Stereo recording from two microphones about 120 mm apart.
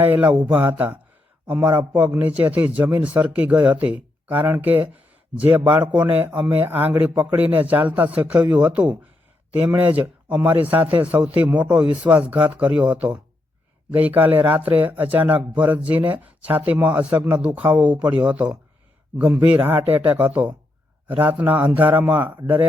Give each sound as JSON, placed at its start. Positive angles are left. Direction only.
{"t": 0.0, "sound": "speech", "side_deg": -15}